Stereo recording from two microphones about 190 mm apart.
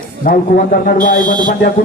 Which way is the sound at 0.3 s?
50° left (ahead or behind).